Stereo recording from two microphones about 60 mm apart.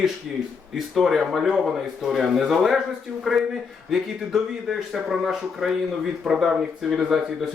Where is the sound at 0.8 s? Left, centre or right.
Centre.